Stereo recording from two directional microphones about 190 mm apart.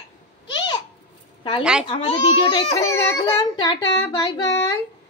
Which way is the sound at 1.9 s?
30° left (ahead or behind).